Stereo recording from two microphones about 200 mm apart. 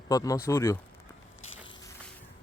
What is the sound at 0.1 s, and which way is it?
Speech, 15° left (ahead or behind).